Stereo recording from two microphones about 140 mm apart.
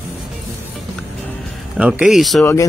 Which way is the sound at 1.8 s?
5° right (ahead or behind).